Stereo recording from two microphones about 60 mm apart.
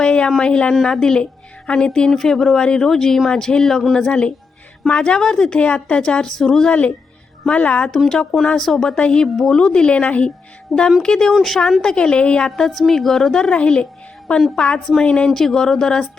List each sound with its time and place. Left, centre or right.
0.0 s a sound: centre
0.3 s a woman's voice: centre
10.7 s a woman's voice: centre
11.0 s a woman's voice: centre
12.5 s a woman's voice: centre
15.3 s a woman's voice: centre